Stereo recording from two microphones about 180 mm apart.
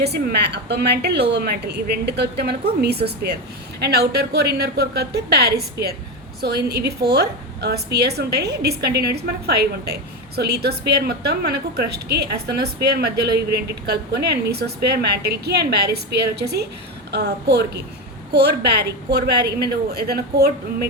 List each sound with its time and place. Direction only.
0.0 s a woman's voice: 65° right (ahead or behind)